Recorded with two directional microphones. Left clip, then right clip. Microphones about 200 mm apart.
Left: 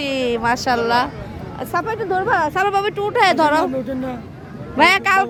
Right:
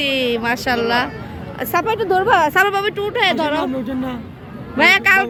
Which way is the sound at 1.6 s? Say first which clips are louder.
Right 4 dB; 15° right (ahead or behind).